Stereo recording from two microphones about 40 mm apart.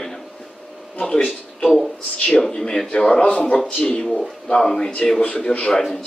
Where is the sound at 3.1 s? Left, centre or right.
Left.